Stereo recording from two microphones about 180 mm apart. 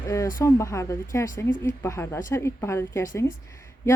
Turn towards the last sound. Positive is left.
turn(degrees=15)  # may be behind; listen again after turning